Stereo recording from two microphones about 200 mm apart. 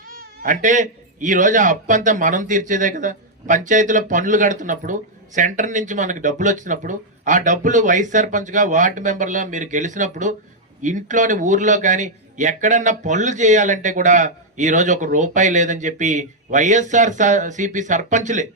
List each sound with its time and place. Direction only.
0.4 s a man's voice: 40° right (ahead or behind)